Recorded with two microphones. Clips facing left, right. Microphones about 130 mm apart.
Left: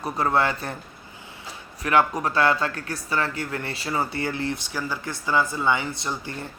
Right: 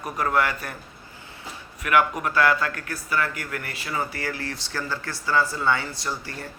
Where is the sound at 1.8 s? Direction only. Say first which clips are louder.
Left 1 dB; 30° left (ahead or behind).